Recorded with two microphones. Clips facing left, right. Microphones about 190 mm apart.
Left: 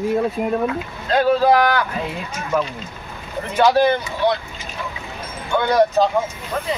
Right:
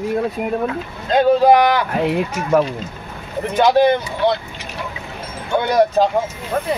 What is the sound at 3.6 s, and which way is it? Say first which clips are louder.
Speech: right 2 dB; 20° right (ahead or behind).